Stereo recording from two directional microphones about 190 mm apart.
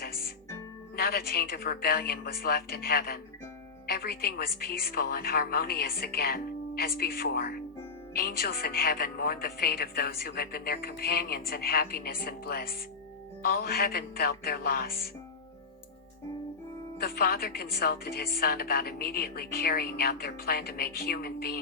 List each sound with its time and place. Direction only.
0.0 s music: 55° left (ahead or behind)
0.9 s a woman's voice: 55° left (ahead or behind)
17.0 s a woman's voice: 55° left (ahead or behind)